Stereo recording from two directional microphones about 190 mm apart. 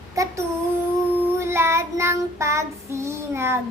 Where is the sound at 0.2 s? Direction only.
15° right (ahead or behind).